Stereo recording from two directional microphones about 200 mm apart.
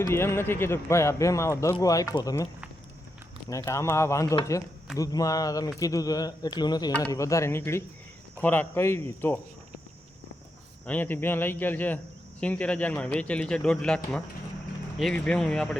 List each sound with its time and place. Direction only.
0.0 s speech: 15° left (ahead or behind)
3.5 s speech: 15° left (ahead or behind)
10.8 s a man's voice: 10° left (ahead or behind)